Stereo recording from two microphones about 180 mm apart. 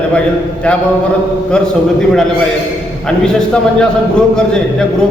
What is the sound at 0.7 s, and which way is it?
A man's voice, 5° left (ahead or behind).